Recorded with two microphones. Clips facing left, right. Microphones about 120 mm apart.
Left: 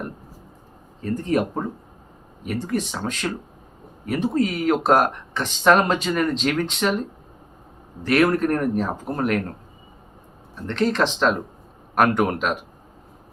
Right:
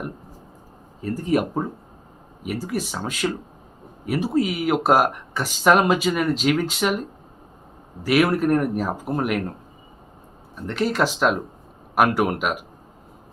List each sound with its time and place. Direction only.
1.0 s speech: 5° right (ahead or behind)
8.0 s speech: 5° right (ahead or behind)
10.5 s speech: 10° right (ahead or behind)